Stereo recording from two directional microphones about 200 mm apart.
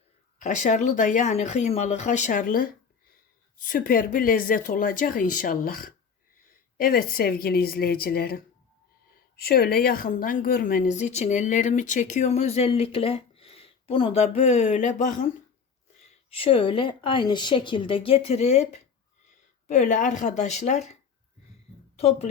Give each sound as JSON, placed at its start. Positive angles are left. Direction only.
{"t": 0.3, "sound": "a woman's voice", "side_deg": 40}
{"t": 16.3, "sound": "a woman's voice", "side_deg": 25}